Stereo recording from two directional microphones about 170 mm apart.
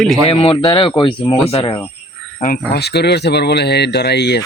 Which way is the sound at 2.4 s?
65° left (ahead or behind).